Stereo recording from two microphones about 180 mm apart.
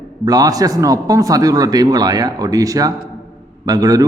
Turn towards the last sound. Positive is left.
turn(degrees=-20)  # may be behind; listen again after turning